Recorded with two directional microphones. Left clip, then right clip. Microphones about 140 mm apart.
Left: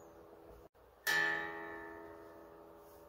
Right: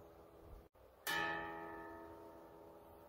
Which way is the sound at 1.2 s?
5° right (ahead or behind).